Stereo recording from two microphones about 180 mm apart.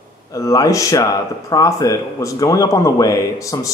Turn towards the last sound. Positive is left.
turn(degrees=20)  # may be behind; listen again after turning